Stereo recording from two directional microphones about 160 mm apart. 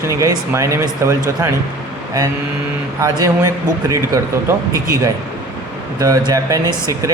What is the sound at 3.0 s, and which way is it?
Speech, 20° right (ahead or behind).